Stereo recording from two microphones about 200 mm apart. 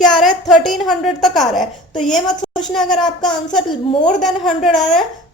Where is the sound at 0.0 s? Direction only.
Centre (ahead or behind).